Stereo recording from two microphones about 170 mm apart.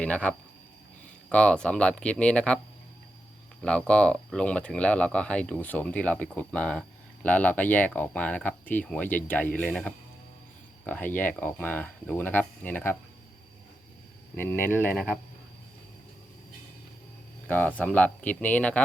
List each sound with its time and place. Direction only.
0.0 s speech: 5° left (ahead or behind)
3.6 s speech: 5° left (ahead or behind)
14.3 s speech: 15° left (ahead or behind)
17.5 s speech: 10° left (ahead or behind)